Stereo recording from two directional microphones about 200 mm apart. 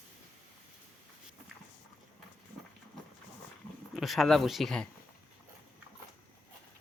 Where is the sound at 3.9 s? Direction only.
Centre (ahead or behind).